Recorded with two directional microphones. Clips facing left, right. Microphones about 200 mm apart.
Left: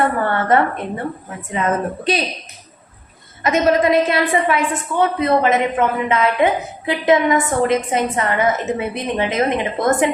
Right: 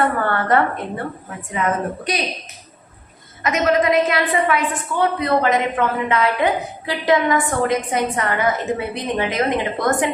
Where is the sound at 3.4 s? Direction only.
30° left (ahead or behind).